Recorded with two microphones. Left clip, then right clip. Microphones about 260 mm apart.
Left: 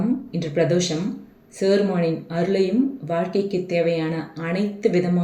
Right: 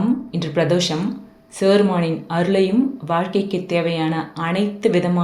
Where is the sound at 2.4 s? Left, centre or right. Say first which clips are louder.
Right 3 dB; right.